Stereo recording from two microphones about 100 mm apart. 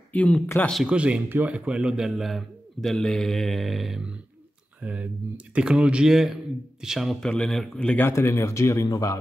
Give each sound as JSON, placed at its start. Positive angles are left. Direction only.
{"t": 0.1, "sound": "speech", "side_deg": 15}
{"t": 0.8, "sound": "speech", "side_deg": -10}
{"t": 8.1, "sound": "speech", "side_deg": 25}